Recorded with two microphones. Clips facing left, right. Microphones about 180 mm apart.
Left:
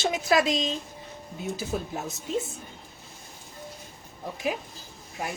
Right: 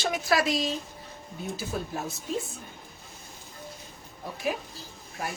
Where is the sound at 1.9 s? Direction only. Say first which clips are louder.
Even; 20° left (ahead or behind).